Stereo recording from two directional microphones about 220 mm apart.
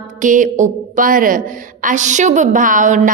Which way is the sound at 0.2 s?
35° right (ahead or behind).